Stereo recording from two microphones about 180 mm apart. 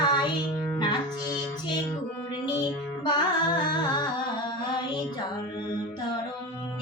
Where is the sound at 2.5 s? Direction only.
25° left (ahead or behind).